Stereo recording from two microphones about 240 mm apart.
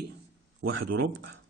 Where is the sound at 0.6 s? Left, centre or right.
Right.